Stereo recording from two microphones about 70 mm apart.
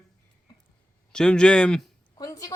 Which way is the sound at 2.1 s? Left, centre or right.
Left.